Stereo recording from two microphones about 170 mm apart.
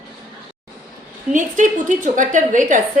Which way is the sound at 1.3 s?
50° right (ahead or behind).